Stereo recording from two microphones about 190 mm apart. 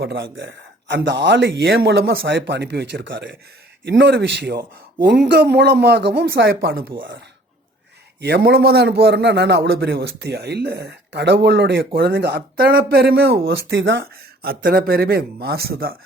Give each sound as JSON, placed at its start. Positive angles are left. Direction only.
{"t": 0.0, "sound": "a man's voice", "side_deg": -75}
{"t": 8.2, "sound": "a man's voice", "side_deg": -60}
{"t": 13.5, "sound": "speech", "side_deg": -70}